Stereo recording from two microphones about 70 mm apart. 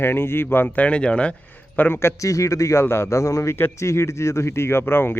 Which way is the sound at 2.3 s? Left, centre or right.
Left.